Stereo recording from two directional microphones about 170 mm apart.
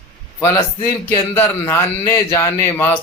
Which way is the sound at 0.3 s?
15° left (ahead or behind).